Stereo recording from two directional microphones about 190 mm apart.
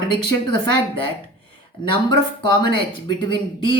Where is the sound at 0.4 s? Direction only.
25° left (ahead or behind).